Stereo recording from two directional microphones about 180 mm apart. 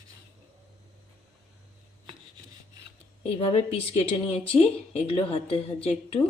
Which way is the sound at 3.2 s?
35° left (ahead or behind).